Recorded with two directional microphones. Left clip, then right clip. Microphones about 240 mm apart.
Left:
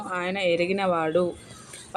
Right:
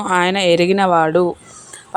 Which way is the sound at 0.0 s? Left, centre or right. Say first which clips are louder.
Right 11 dB; right.